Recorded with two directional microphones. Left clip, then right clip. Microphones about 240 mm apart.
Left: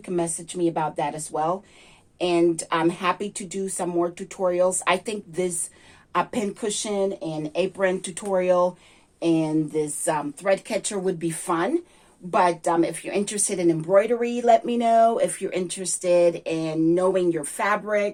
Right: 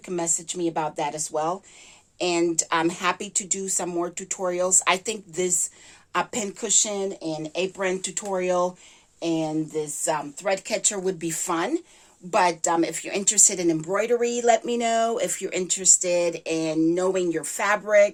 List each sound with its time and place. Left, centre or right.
0.0 s speech: right